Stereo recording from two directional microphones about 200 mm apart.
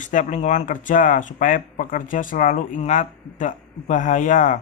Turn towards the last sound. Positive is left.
turn(degrees=40)  # may be behind; listen again after turning